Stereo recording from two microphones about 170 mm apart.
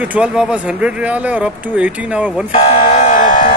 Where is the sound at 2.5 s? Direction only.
35° left (ahead or behind).